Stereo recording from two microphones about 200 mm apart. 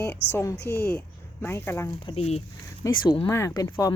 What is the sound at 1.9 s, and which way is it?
Speech, 25° left (ahead or behind).